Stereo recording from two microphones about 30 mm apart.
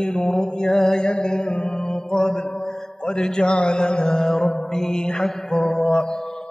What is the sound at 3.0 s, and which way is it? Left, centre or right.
Mantra, left.